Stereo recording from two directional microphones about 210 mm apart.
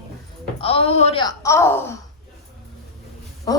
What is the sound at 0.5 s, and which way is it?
Speech, 25° left (ahead or behind).